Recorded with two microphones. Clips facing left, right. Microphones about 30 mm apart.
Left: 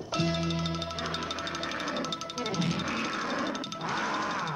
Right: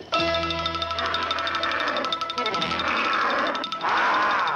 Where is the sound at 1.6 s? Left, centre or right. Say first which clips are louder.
Right 8 dB; right.